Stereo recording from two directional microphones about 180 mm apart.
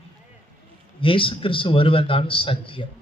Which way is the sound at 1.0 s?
30° left (ahead or behind).